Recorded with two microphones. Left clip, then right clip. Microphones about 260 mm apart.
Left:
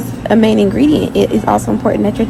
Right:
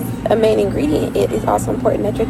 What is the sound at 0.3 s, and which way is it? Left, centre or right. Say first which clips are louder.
Speech: left 2 dB; left.